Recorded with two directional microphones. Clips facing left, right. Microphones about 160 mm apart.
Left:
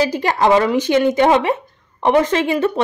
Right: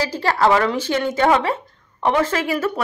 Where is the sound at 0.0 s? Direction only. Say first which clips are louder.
Left 2 dB; 15° left (ahead or behind).